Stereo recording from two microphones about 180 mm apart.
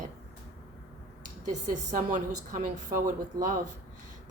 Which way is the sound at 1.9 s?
45° right (ahead or behind).